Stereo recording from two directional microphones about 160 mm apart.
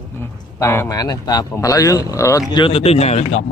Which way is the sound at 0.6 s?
15° left (ahead or behind).